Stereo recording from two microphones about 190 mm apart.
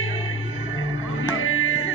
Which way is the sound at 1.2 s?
90° left.